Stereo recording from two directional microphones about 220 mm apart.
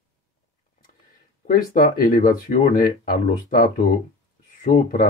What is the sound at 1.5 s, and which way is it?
Speech, 40° left (ahead or behind).